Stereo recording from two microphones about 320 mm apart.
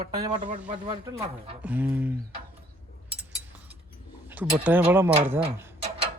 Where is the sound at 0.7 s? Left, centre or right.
Centre.